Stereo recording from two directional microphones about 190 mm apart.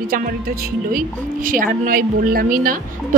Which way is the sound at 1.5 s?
50° right (ahead or behind).